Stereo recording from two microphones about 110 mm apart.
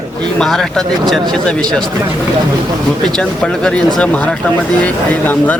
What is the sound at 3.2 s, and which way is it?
Speech, 5° left (ahead or behind).